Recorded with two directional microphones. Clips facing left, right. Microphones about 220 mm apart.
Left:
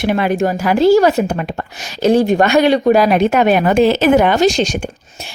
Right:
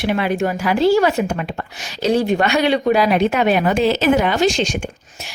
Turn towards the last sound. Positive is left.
turn(degrees=35)  # may be behind; listen again after turning